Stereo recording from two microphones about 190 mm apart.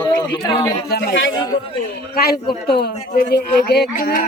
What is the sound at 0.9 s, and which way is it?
Speech, 70° left (ahead or behind).